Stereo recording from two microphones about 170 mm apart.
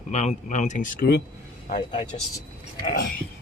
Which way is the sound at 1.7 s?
30° left (ahead or behind).